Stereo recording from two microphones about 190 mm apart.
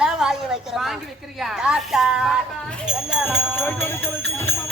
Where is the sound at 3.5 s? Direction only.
10° left (ahead or behind).